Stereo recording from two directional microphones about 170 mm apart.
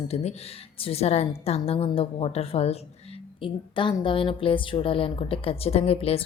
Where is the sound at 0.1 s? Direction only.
40° left (ahead or behind).